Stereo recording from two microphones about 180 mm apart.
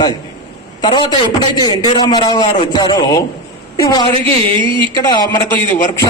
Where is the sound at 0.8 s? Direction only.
25° left (ahead or behind).